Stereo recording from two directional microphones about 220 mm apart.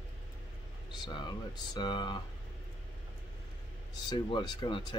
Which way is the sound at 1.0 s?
20° left (ahead or behind).